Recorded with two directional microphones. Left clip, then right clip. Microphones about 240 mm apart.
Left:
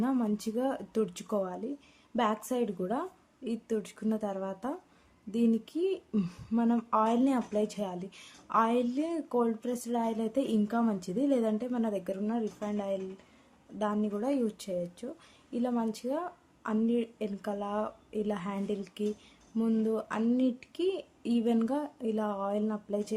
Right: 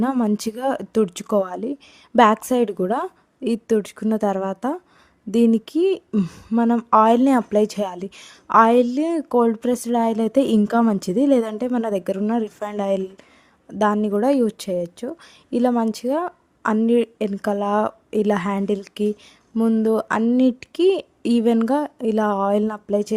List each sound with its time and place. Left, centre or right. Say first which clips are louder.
0.0 s speech: right 10 dB; right